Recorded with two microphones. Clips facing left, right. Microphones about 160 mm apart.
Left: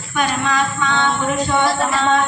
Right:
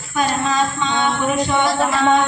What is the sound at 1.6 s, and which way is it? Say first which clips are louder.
Female singing: even; centre (ahead or behind).